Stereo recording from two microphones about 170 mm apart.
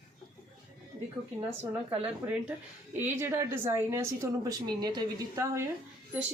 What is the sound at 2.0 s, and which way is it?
A woman's voice, 10° right (ahead or behind).